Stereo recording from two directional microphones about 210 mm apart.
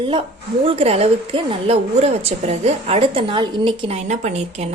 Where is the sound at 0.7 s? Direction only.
30° right (ahead or behind).